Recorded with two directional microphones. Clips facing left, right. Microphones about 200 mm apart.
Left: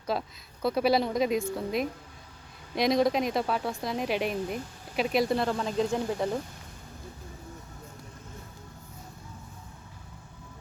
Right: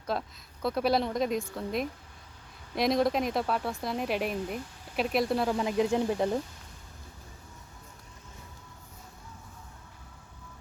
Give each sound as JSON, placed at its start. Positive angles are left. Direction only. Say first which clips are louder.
{"t": 0.0, "sound": "speech", "louder": "left 2 dB", "side_deg": 0}
{"t": 5.5, "sound": "speech", "louder": "right 2 dB", "side_deg": -15}